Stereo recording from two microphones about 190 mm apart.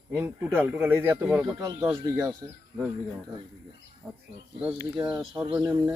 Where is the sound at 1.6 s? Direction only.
20° right (ahead or behind).